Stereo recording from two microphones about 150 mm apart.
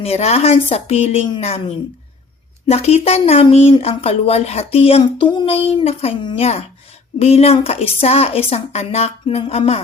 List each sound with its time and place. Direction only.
0.0 s speech: 45° left (ahead or behind)
2.6 s speech: 45° left (ahead or behind)